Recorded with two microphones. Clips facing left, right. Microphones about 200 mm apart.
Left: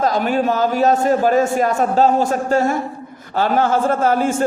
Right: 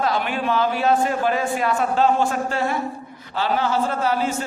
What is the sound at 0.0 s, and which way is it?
A man's voice, 40° left (ahead or behind).